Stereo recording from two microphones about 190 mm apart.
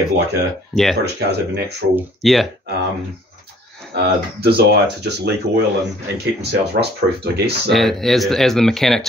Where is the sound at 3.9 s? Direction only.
60° right (ahead or behind).